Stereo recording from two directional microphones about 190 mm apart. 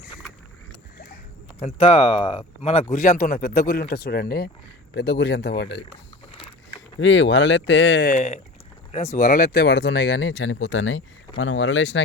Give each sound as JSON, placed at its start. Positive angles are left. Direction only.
{"t": 1.6, "sound": "speech", "side_deg": 30}
{"t": 7.0, "sound": "speech", "side_deg": 70}
{"t": 8.1, "sound": "speech", "side_deg": 35}